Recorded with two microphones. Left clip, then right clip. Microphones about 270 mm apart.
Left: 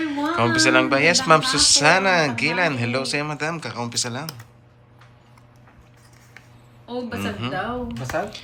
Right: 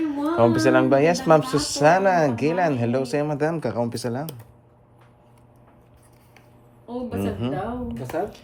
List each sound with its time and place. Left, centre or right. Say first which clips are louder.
0.0 s a sound: even; centre
0.5 s speech: left 1 dB; centre
7.2 s speech: right 1 dB; centre
8.1 s speech: left 1 dB; left